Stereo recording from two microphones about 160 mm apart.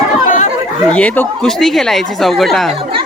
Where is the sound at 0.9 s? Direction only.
10° left (ahead or behind).